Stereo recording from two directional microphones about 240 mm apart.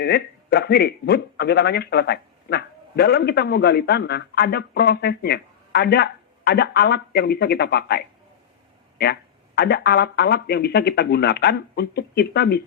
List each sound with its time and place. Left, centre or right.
0.0 s speech: left
9.6 s speech: left